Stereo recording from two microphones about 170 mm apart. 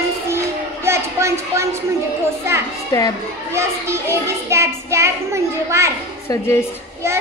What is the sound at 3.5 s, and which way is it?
A child's voice, 15° right (ahead or behind).